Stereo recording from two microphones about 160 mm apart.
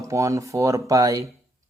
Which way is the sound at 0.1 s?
20° right (ahead or behind).